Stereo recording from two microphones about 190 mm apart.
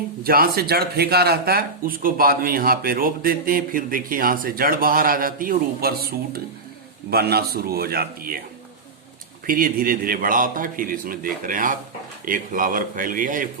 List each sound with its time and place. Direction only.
0.3 s speech: 50° right (ahead or behind)
9.5 s speech: 50° right (ahead or behind)